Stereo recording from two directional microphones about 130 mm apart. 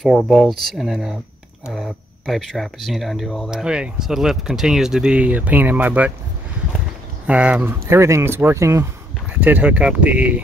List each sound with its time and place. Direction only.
0.0 s speech: centre (ahead or behind)
7.2 s speech: 10° right (ahead or behind)
7.8 s speech: 20° right (ahead or behind)
9.4 s speech: 10° right (ahead or behind)